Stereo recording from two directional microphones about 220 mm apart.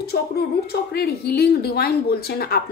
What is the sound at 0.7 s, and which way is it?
A woman's voice, 45° left (ahead or behind).